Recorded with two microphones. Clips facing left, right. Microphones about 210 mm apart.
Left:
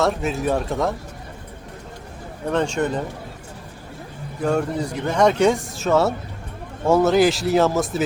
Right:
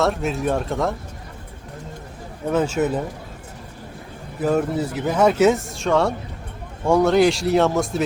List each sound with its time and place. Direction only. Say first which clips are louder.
0.0 s speech: even; centre (ahead or behind)
2.5 s speech: right 1 dB; 5° right (ahead or behind)
4.4 s speech: right 1 dB; 5° right (ahead or behind)